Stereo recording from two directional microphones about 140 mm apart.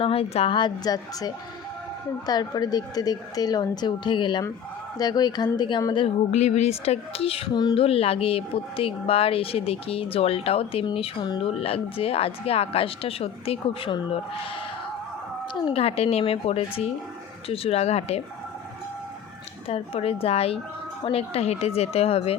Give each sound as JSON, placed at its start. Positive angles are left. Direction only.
{"t": 0.0, "sound": "a woman's voice", "side_deg": 45}
{"t": 6.3, "sound": "a woman's voice", "side_deg": 50}
{"t": 7.6, "sound": "a woman's voice", "side_deg": 30}
{"t": 7.9, "sound": "a woman's voice", "side_deg": 45}
{"t": 15.6, "sound": "a woman's voice", "side_deg": 45}
{"t": 19.6, "sound": "a woman's voice", "side_deg": 45}